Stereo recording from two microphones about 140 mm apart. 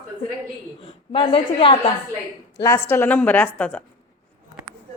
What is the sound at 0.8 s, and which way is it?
Speech, 40° left (ahead or behind).